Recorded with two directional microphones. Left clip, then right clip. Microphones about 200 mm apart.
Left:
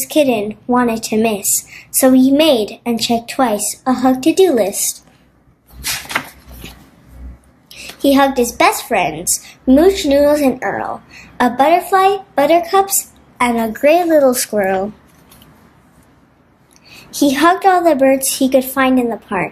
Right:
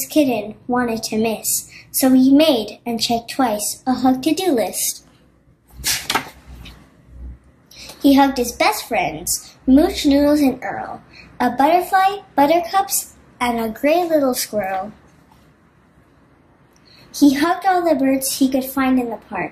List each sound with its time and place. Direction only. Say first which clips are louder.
0.0 s a woman's voice: left 4 dB; 50° left (ahead or behind)
7.7 s a woman's voice: left 2 dB; 45° left (ahead or behind)
17.1 s a woman's voice: left 4 dB; 50° left (ahead or behind)